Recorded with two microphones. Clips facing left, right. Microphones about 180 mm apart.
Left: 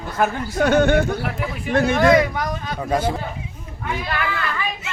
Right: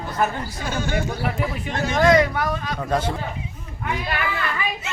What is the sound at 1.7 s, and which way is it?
Speech, 60° left (ahead or behind).